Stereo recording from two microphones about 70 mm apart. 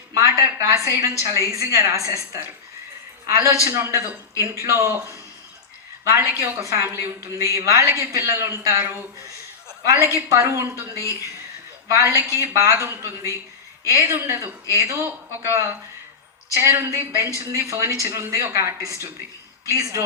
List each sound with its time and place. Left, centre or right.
0.1 s a woman's voice: right